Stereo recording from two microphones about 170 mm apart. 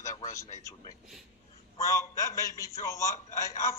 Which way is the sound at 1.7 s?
20° left (ahead or behind).